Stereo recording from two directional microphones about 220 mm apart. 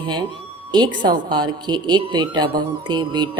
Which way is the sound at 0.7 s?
20° right (ahead or behind).